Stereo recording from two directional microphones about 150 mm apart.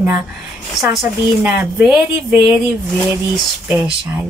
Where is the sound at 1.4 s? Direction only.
10° right (ahead or behind).